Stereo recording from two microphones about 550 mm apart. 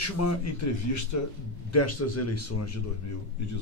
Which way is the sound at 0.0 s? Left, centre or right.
Left.